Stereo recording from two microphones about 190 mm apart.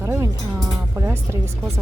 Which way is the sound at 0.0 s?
15° right (ahead or behind).